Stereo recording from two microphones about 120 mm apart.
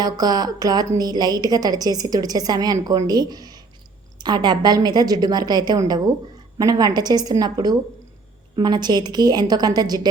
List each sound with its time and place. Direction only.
0.0 s a woman's voice: 35° right (ahead or behind)